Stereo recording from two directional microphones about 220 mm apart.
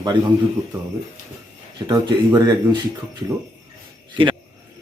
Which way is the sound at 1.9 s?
20° right (ahead or behind).